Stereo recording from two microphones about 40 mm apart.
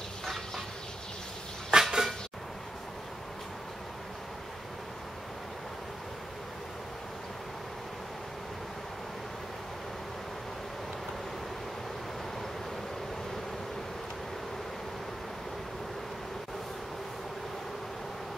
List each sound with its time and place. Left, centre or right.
1.7 s dishes: centre